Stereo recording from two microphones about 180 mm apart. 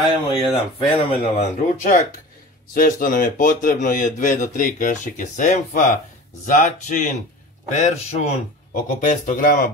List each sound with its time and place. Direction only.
0.4 s a man's voice: 30° left (ahead or behind); by 9.7 s 50° left (ahead or behind)